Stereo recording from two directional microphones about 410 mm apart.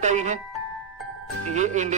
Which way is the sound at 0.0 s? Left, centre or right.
Centre.